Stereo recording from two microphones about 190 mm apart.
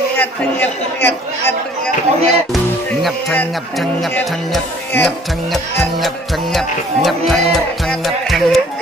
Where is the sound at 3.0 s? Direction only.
Centre (ahead or behind).